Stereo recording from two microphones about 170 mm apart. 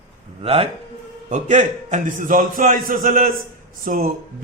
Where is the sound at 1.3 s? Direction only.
45° right (ahead or behind).